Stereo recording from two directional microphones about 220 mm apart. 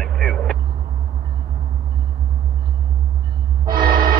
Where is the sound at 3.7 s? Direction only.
40° right (ahead or behind).